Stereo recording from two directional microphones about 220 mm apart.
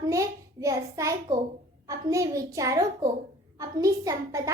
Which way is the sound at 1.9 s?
15° right (ahead or behind).